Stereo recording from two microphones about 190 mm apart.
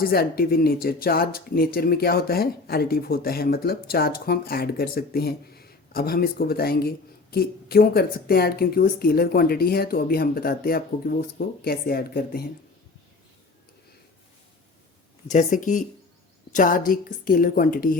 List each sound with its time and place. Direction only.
0.0 s speech: 55° left (ahead or behind)
15.3 s speech: 40° left (ahead or behind)